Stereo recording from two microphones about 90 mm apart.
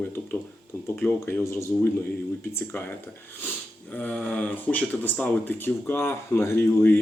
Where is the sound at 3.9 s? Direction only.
15° left (ahead or behind).